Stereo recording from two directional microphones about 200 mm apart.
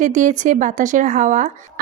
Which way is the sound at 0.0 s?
40° right (ahead or behind).